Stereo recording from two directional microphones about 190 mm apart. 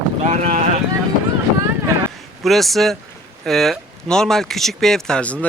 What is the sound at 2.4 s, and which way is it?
Speech, centre (ahead or behind).